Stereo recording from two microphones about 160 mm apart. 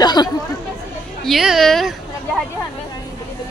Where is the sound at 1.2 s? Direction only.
Centre (ahead or behind).